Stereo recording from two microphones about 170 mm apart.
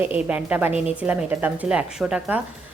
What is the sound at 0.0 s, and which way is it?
A woman's voice, 10° right (ahead or behind).